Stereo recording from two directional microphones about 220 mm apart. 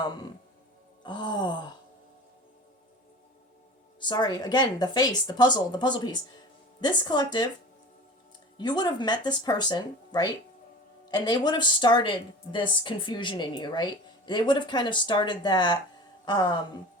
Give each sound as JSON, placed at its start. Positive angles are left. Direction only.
{"t": 0.0, "sound": "speech", "side_deg": 20}
{"t": 4.0, "sound": "speech", "side_deg": 20}
{"t": 8.5, "sound": "speech", "side_deg": 20}